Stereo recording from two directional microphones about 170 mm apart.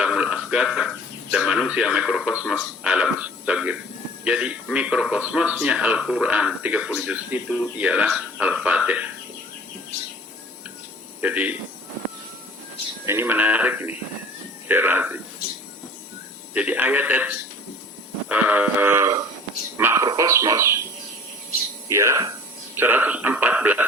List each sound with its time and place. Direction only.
0.0 s a sound: 5° right (ahead or behind)
2.8 s speech: 5° right (ahead or behind)
11.2 s speech: 10° right (ahead or behind)
13.1 s speech: 10° right (ahead or behind)
16.6 s speech: 10° right (ahead or behind)
21.8 s speech: 15° right (ahead or behind)